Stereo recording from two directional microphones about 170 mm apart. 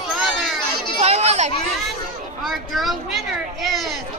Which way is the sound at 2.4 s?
Centre (ahead or behind).